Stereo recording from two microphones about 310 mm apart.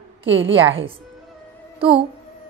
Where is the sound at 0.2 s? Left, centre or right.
Right.